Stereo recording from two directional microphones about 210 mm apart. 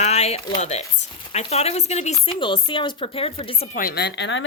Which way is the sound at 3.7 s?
45° left (ahead or behind).